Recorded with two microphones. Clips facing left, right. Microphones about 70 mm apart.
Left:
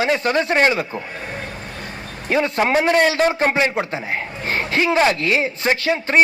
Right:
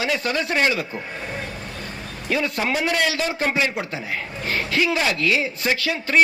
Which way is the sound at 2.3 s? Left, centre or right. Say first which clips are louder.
Left 5 dB; left.